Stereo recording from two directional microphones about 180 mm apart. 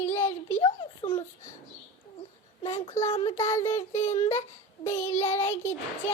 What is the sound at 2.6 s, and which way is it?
Child singing, 35° left (ahead or behind).